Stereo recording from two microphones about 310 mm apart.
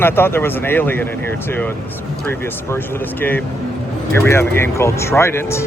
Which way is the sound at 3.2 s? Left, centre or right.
Centre.